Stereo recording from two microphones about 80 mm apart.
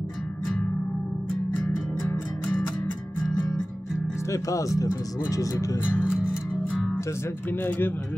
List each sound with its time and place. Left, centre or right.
4.3 s speech: left
7.4 s speech: left